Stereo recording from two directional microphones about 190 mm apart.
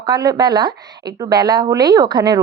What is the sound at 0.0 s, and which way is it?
Speech, 20° right (ahead or behind).